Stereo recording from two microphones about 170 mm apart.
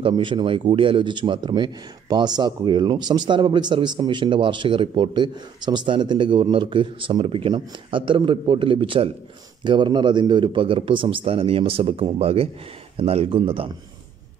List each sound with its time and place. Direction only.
0.0 s a man's voice: 30° right (ahead or behind)